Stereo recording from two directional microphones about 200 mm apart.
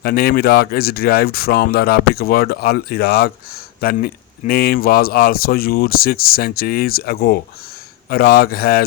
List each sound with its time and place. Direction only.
0.0 s speech: 50° left (ahead or behind)